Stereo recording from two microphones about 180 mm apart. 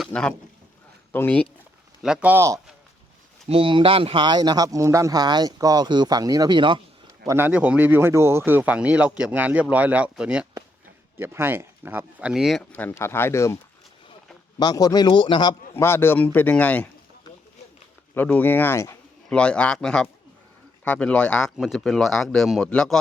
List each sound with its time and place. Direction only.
0.0 s a man's voice: 5° left (ahead or behind)
2.0 s speech: 5° right (ahead or behind)
3.5 s a man's voice: 30° right (ahead or behind)
7.3 s speech: 10° right (ahead or behind)
12.7 s speech: 10° left (ahead or behind)
14.6 s a man's voice: 20° left (ahead or behind)
15.7 s speech: 15° left (ahead or behind)
18.1 s a man's voice: 10° left (ahead or behind)